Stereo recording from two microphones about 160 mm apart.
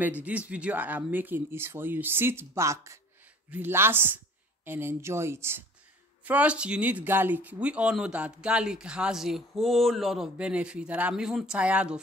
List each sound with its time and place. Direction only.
0.2 s speech: 10° right (ahead or behind)